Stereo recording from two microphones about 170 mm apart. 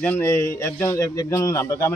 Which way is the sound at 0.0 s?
15° left (ahead or behind).